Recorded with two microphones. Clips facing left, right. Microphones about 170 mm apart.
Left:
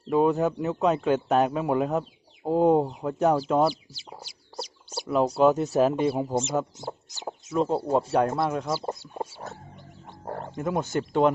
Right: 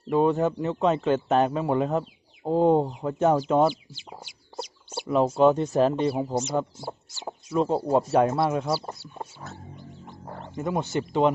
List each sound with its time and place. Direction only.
0.1 s speech: centre (ahead or behind)
4.3 s chicken: 40° left (ahead or behind)
5.0 s speech: centre (ahead or behind)
6.7 s speech: 20° left (ahead or behind)
7.5 s speech: centre (ahead or behind)
8.7 s speech: 20° left (ahead or behind)
10.2 s wild animals: 50° left (ahead or behind)
10.5 s speech: centre (ahead or behind)